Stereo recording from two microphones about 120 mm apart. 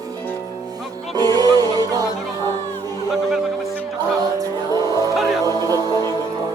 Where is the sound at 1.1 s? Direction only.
35° right (ahead or behind).